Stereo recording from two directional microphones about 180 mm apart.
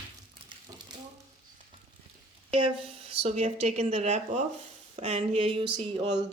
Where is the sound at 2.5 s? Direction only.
30° right (ahead or behind).